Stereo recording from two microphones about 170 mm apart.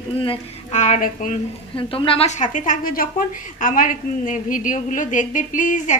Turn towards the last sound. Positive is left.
turn(degrees=50)  # may be behind; listen again after turning